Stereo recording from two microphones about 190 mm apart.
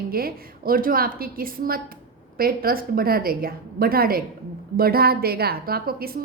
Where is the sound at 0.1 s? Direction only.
50° right (ahead or behind).